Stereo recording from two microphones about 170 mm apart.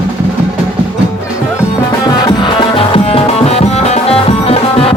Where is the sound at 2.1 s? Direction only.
25° left (ahead or behind).